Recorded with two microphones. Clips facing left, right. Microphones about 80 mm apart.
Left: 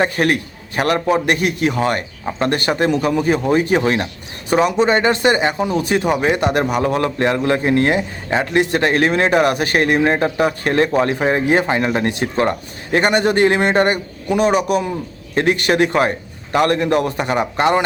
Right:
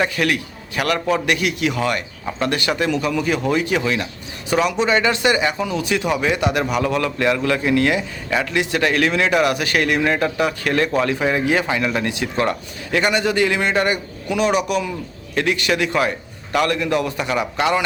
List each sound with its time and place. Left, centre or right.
0.0 s speech: left